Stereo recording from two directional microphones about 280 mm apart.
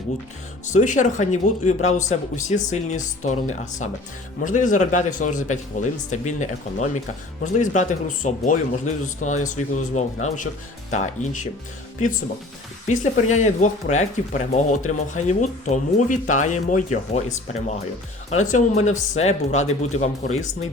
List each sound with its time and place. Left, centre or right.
0.7 s speech: left
12.9 s speech: left
18.3 s speech: left